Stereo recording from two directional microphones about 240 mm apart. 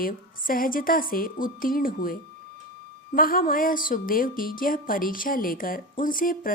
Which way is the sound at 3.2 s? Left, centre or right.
Left.